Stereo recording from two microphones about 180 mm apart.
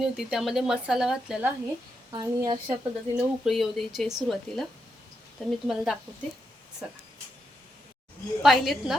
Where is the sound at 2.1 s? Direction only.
20° right (ahead or behind).